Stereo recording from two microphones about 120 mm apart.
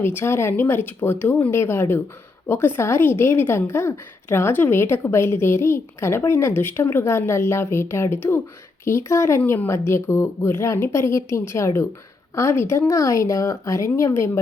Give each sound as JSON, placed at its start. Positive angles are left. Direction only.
{"t": 0.0, "sound": "a woman's voice", "side_deg": 20}